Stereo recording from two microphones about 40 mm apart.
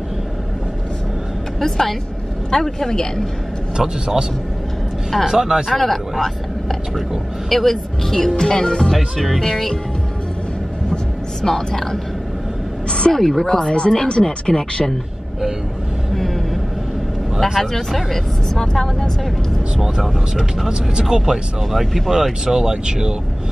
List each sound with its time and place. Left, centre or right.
1.6 s speech: centre
3.7 s speech: centre
5.3 s speech: centre
5.7 s speech: centre
8.4 s speech: centre
8.9 s speech: centre
11.4 s speech: centre
13.1 s speech: centre
13.6 s speech: left
17.6 s speech: centre
20.6 s speech: centre
21.7 s speech: centre
22.5 s speech: centre